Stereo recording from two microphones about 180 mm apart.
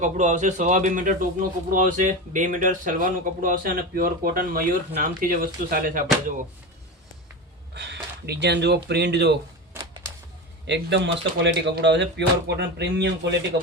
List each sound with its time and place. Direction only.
0.0 s speech: 45° right (ahead or behind)
7.7 s speech: 70° right (ahead or behind)
10.7 s speech: 75° right (ahead or behind)